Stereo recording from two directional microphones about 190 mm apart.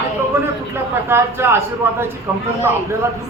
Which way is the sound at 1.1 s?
15° right (ahead or behind).